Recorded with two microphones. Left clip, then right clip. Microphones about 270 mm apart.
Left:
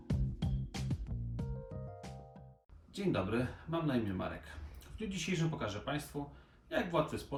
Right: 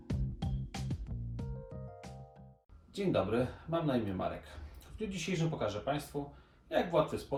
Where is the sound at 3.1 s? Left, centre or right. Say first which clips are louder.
Right 4 dB; centre.